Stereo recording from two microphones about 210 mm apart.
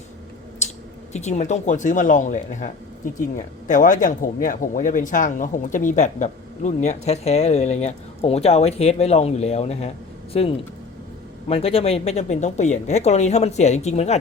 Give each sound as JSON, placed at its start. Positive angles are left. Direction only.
{"t": 1.1, "sound": "speech", "side_deg": 35}